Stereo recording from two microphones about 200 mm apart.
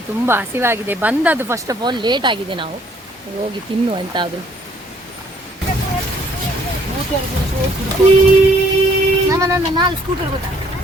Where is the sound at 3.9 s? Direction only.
25° right (ahead or behind).